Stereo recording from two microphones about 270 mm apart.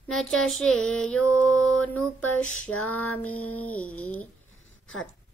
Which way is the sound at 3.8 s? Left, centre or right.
Centre.